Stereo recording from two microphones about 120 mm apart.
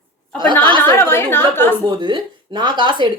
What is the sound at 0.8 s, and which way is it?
Speech, 20° left (ahead or behind).